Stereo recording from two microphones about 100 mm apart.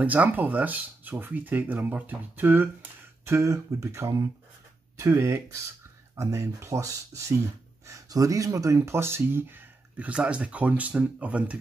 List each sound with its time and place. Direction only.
0.0 s speech: 15° right (ahead or behind)
3.3 s speech: 30° right (ahead or behind)